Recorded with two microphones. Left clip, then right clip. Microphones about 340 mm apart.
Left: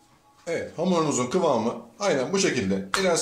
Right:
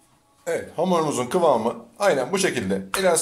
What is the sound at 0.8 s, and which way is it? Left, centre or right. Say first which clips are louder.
Speech: right 2 dB; right.